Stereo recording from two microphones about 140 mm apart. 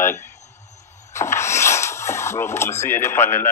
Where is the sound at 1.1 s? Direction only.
20° left (ahead or behind).